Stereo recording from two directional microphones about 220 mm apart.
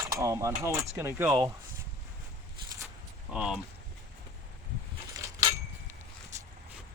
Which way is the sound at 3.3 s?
5° right (ahead or behind).